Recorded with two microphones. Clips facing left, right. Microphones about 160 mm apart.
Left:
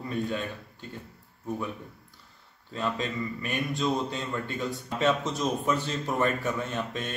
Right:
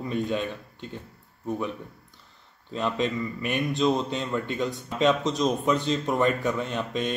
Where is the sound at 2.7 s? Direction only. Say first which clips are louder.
Right 4 dB; 20° right (ahead or behind).